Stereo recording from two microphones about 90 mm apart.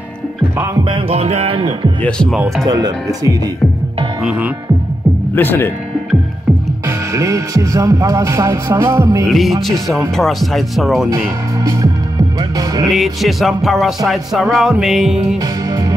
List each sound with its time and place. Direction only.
0.8 s music: 80° right
2.6 s speech: 45° right (ahead or behind)
4.2 s music: 10° right (ahead or behind)
5.3 s speech: 25° left (ahead or behind)
7.2 s music: 35° right (ahead or behind)
9.2 s music: centre (ahead or behind)
11.1 s speech: 40° right (ahead or behind)
12.8 s music: centre (ahead or behind)